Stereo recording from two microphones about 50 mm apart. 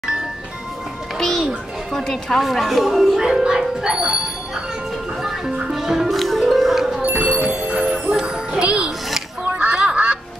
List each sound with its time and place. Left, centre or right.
1.4 s music: centre
2.5 s speech: centre
3.3 s music: centre
5.7 s music: centre
7.1 s music: right
9.6 s quack: right